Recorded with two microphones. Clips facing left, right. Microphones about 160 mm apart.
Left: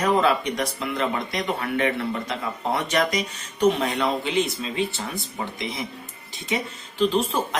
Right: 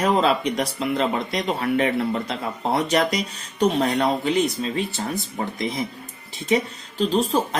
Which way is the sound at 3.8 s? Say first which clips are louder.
Right 3 dB; 40° right (ahead or behind).